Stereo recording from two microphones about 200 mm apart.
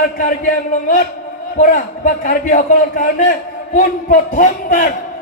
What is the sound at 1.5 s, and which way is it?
A man's voice, 40° left (ahead or behind).